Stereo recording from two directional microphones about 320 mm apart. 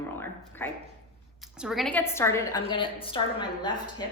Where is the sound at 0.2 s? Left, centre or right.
Centre.